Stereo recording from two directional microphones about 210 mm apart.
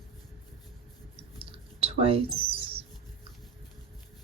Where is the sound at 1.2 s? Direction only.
25° right (ahead or behind).